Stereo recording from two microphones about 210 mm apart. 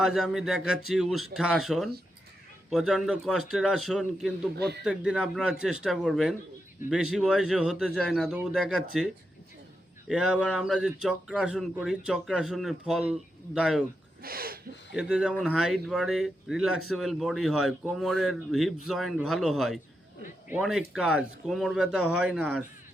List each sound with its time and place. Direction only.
0.0 s a man's voice: centre (ahead or behind)
4.5 s speech: 50° right (ahead or behind)
4.8 s a man's voice: 5° right (ahead or behind)
10.1 s a man's voice: 5° right (ahead or behind)
14.2 s speech: 45° right (ahead or behind)
14.9 s a man's voice: 5° right (ahead or behind)